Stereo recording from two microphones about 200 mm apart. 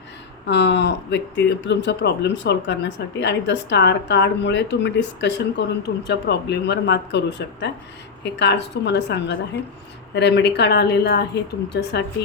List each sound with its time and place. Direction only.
0.4 s speech: 60° left (ahead or behind)